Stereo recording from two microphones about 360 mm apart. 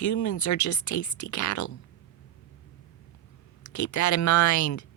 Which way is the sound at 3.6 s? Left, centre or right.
Left.